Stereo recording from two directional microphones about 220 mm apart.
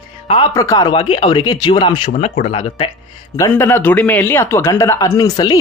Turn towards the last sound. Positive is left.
turn(degrees=20)  # may be behind; listen again after turning